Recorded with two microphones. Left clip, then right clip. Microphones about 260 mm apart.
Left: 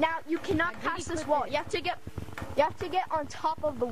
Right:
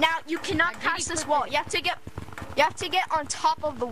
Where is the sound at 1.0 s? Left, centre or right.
Right.